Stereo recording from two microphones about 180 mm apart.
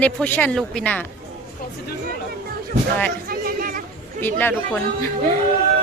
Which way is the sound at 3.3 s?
55° right (ahead or behind).